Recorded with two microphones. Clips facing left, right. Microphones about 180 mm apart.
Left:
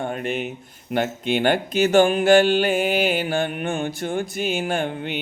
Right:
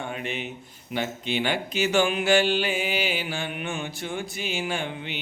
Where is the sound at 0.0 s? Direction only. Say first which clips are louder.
Left 6 dB; 50° left (ahead or behind).